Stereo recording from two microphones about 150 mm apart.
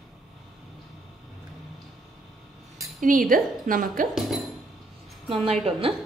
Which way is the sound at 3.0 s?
65° right (ahead or behind).